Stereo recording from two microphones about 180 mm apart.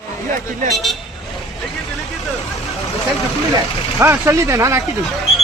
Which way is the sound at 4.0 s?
15° right (ahead or behind).